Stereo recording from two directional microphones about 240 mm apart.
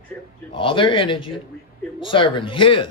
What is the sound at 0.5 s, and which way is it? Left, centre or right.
A man's voice, left.